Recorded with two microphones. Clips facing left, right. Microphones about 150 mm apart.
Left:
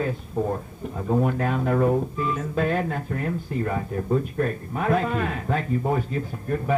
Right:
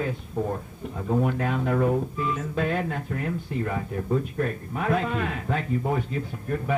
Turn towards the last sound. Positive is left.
turn(degrees=40)  # may be behind; listen again after turning